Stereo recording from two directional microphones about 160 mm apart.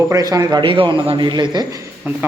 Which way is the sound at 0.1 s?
20° right (ahead or behind).